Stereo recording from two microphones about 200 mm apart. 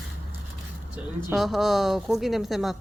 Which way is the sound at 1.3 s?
Centre (ahead or behind).